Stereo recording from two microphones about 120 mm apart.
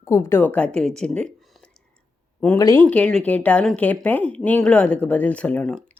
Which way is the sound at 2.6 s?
25° left (ahead or behind).